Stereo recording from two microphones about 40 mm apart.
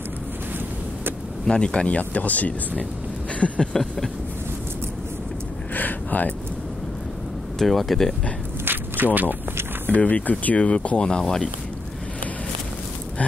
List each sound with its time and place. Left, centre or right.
1.5 s speech: left
2.0 s speech: left
5.8 s a sound: left
7.5 s speech: centre
8.6 s walk: right
9.8 s speech: left
10.6 s speech: left